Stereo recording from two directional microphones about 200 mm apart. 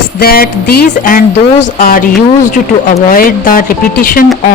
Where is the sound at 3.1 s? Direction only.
45° left (ahead or behind).